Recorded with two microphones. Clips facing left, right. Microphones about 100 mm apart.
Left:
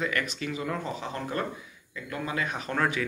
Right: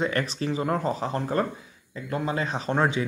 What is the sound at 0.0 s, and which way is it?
Speech, 35° right (ahead or behind).